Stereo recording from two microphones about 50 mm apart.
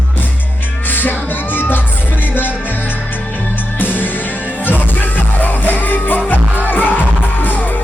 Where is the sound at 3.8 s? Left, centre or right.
Left.